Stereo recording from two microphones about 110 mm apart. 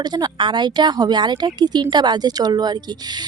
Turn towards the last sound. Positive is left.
turn(degrees=-40)  # may be behind; listen again after turning